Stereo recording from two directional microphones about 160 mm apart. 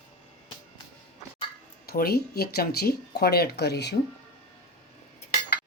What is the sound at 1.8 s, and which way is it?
Speech, 75° left (ahead or behind).